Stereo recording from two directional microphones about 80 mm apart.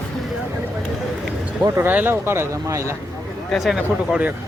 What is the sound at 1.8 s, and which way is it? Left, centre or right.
Speech, right.